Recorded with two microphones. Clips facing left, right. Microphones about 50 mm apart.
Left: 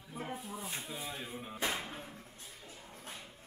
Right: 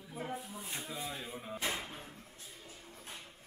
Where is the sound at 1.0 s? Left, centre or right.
Centre.